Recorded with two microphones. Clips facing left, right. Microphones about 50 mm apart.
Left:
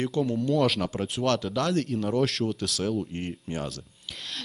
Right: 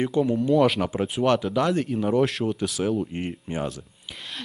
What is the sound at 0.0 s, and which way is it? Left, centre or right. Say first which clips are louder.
A woman's voice: right 4 dB; centre.